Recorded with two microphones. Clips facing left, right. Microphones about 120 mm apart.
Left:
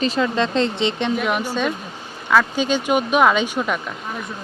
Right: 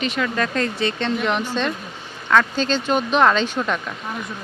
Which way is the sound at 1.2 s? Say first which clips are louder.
Left 1 dB; 10° left (ahead or behind).